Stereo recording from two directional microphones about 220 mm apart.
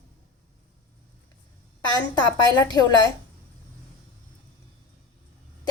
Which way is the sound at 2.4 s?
20° left (ahead or behind).